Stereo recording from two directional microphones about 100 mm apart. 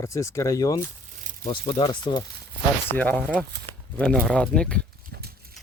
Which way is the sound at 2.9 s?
15° left (ahead or behind).